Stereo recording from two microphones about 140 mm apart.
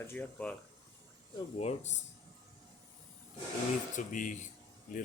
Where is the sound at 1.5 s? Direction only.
50° left (ahead or behind).